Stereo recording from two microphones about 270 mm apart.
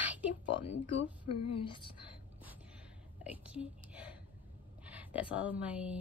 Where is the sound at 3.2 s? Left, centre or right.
Centre.